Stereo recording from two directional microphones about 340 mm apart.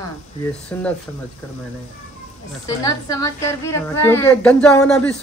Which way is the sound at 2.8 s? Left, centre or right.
Centre.